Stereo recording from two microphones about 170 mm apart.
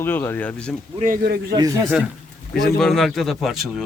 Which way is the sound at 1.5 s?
20° right (ahead or behind).